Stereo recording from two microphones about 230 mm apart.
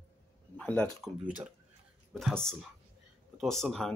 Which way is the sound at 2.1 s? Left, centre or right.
Centre.